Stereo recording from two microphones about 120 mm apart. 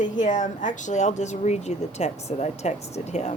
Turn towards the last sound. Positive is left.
turn(degrees=70)  # may be behind; listen again after turning